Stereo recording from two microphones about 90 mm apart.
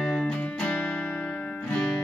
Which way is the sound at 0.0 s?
5° left (ahead or behind).